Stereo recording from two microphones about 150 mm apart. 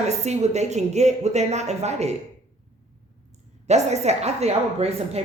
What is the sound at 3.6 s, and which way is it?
Speech, 50° right (ahead or behind).